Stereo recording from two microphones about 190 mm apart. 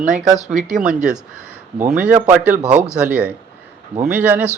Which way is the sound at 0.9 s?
5° right (ahead or behind).